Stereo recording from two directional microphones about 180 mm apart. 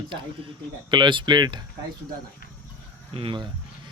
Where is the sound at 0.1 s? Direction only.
25° right (ahead or behind).